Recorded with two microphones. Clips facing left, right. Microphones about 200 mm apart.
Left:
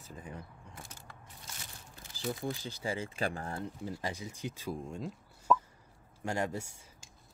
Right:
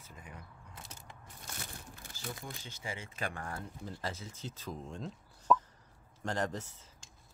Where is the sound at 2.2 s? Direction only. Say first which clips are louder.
Left 9 dB; 35° left (ahead or behind).